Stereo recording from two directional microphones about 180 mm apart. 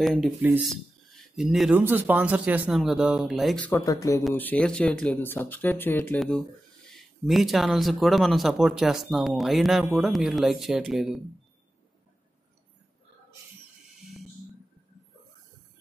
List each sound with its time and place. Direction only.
0.0 s speech: centre (ahead or behind)
3.8 s speech: 20° left (ahead or behind); by 11.1 s centre (ahead or behind)